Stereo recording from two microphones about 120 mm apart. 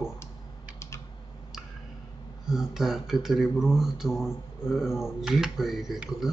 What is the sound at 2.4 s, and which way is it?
Speech, 5° right (ahead or behind).